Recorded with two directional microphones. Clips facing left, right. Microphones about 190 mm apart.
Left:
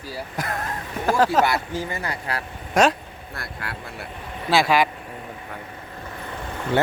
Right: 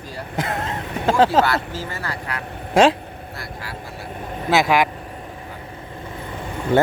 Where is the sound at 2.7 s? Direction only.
30° right (ahead or behind).